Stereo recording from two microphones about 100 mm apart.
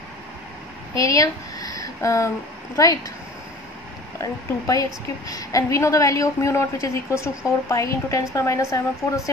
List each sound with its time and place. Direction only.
0.9 s speech: 35° left (ahead or behind)
4.2 s a woman's voice: 35° left (ahead or behind)